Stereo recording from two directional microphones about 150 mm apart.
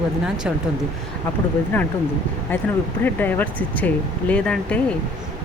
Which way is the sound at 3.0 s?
10° left (ahead or behind).